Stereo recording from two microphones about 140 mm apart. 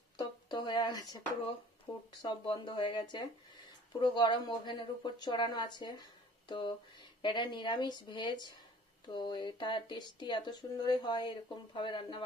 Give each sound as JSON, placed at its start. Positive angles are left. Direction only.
{"t": 0.2, "sound": "speech", "side_deg": 30}